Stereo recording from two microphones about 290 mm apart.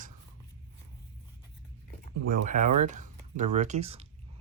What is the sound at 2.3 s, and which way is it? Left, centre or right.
Speech, right.